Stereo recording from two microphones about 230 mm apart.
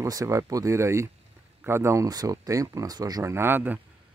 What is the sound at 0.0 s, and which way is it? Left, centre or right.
Speech, centre.